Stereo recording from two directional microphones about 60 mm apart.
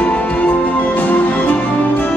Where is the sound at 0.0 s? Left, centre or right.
Left.